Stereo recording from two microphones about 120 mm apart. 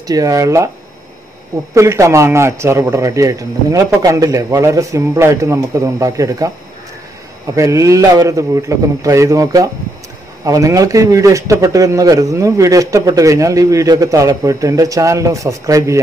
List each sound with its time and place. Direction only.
0.0 s a man's voice: 30° right (ahead or behind)
1.7 s a man's voice: 25° right (ahead or behind)
7.5 s a man's voice: 25° right (ahead or behind)